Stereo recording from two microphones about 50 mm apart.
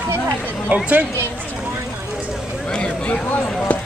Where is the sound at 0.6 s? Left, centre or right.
Right.